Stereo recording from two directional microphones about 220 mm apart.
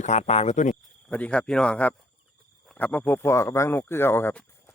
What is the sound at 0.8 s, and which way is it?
Speech, 5° left (ahead or behind).